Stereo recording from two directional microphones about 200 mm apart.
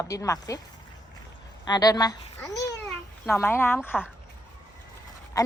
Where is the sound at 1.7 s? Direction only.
20° left (ahead or behind).